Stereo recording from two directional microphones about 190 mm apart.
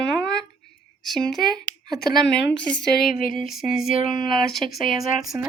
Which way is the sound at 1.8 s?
20° right (ahead or behind).